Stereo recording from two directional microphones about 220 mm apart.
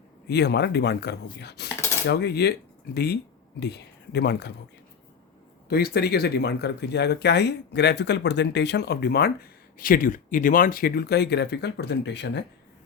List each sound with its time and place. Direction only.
0.3 s speech: 50° left (ahead or behind)
5.6 s speech: 45° left (ahead or behind)